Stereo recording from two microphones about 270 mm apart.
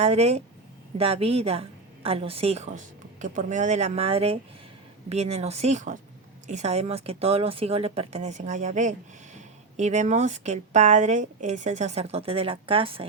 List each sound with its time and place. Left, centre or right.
0.0 s a woman's voice: right